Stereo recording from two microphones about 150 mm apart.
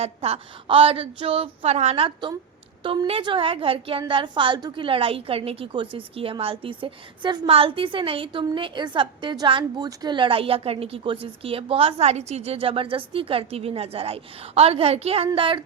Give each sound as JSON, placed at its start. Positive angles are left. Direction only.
{"t": 0.0, "sound": "a woman's voice", "side_deg": -40}